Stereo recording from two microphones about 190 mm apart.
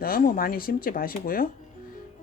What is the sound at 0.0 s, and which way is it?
Speech, 50° left (ahead or behind).